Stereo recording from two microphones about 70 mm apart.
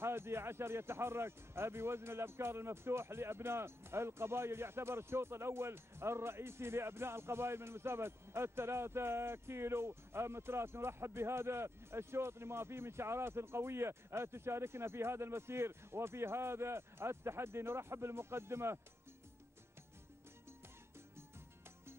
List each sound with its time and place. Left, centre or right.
0.0 s speech: right